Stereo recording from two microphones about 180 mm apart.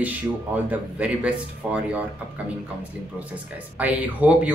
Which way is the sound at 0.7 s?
5° right (ahead or behind).